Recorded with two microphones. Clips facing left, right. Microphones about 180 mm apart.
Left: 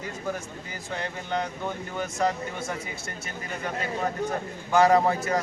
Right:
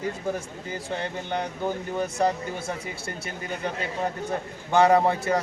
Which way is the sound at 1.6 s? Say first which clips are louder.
Right 4 dB; 30° right (ahead or behind).